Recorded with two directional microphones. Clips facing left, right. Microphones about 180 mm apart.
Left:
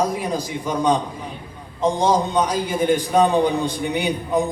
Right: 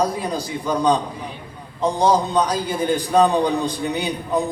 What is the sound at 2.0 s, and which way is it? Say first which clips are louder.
A man's voice: right 2 dB; 10° left (ahead or behind).